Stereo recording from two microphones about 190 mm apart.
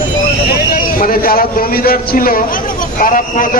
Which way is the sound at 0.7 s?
50° left (ahead or behind).